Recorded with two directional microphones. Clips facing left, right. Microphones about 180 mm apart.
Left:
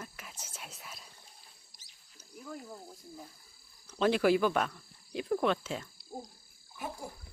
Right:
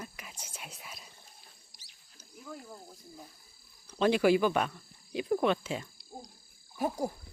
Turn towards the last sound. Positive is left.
turn(degrees=-40)  # may be behind; listen again after turning